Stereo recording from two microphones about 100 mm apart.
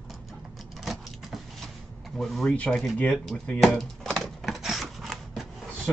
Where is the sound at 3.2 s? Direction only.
5° left (ahead or behind).